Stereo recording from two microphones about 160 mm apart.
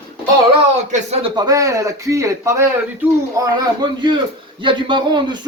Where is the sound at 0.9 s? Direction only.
40° right (ahead or behind).